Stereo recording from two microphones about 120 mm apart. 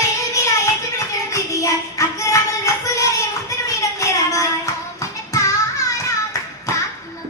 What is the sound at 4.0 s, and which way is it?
Child singing, 25° left (ahead or behind).